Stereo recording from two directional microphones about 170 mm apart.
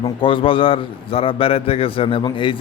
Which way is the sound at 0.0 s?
30° left (ahead or behind).